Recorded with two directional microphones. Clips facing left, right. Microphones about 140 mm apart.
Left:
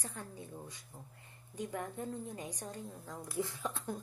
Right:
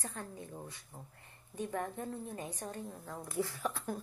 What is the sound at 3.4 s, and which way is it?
Speech, 20° left (ahead or behind).